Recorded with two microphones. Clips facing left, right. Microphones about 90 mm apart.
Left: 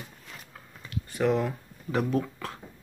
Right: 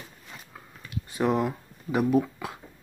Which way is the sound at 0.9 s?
20° right (ahead or behind).